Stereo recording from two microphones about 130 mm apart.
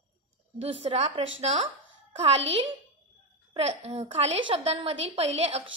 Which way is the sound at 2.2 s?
40° right (ahead or behind).